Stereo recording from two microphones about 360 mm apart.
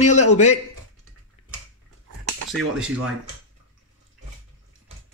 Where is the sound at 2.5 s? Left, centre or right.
Centre.